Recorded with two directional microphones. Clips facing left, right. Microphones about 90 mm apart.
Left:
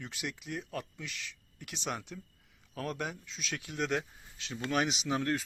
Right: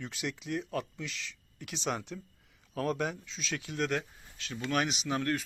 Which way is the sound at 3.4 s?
10° left (ahead or behind).